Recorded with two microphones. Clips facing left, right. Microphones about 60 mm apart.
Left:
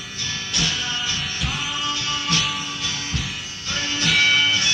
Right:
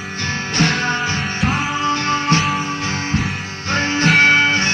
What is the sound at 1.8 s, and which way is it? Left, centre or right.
Music, right.